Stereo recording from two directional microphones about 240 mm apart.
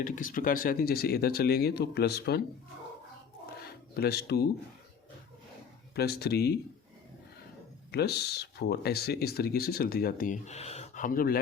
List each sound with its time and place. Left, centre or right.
0.0 s speech: left
3.6 s a sound: left
5.9 s speech: left
7.9 s speech: left